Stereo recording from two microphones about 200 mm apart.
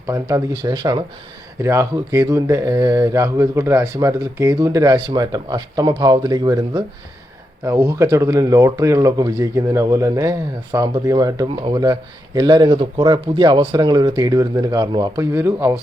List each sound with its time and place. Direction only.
0.1 s speech: 15° right (ahead or behind)